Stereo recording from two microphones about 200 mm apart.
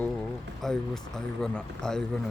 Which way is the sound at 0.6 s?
Centre (ahead or behind).